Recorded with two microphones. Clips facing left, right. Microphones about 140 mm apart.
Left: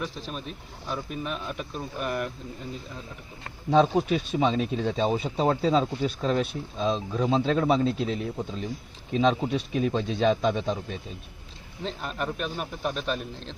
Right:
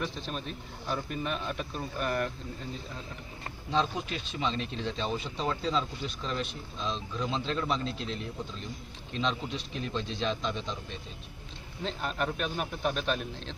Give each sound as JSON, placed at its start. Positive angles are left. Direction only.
{"t": 0.0, "sound": "speech", "side_deg": 5}
{"t": 3.7, "sound": "speech", "side_deg": 65}
{"t": 4.5, "sound": "speech", "side_deg": 10}
{"t": 4.9, "sound": "speech", "side_deg": 55}
{"t": 7.9, "sound": "speech", "side_deg": 5}
{"t": 9.2, "sound": "speech", "side_deg": 55}
{"t": 11.8, "sound": "speech", "side_deg": 0}